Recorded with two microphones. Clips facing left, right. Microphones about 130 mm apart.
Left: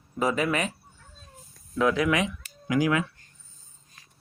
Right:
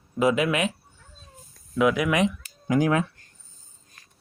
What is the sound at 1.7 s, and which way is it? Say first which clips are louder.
Speech: right 2 dB; 10° right (ahead or behind).